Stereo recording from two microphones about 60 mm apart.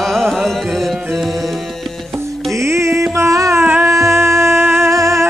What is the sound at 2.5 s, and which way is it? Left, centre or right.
Music, right.